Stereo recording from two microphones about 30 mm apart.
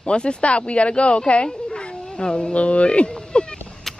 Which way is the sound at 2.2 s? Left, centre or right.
Left.